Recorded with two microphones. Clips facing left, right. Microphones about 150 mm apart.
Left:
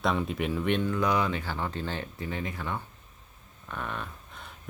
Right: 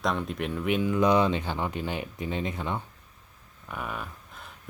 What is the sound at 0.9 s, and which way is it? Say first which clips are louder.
Speech: right 5 dB; 20° right (ahead or behind).